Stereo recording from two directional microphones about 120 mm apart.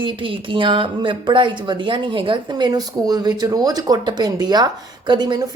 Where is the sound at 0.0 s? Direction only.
45° right (ahead or behind).